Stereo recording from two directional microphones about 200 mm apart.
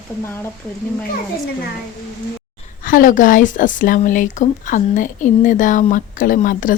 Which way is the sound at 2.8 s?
45° left (ahead or behind).